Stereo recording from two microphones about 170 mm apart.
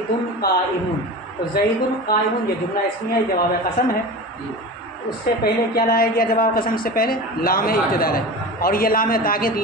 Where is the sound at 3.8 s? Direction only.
60° left (ahead or behind).